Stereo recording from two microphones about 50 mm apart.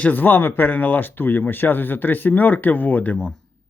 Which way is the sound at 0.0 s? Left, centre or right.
Left.